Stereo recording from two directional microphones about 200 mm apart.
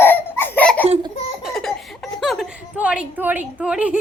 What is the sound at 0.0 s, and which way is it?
Laughter, 10° left (ahead or behind).